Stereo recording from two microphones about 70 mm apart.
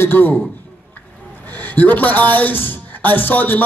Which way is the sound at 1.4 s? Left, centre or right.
Left.